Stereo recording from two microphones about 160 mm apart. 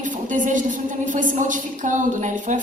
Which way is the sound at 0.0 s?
55° right (ahead or behind).